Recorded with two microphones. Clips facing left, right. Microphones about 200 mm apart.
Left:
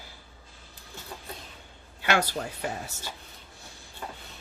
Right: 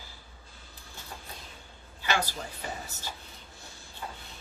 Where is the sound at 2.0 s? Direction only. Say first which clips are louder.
Left 4 dB; 65° left (ahead or behind).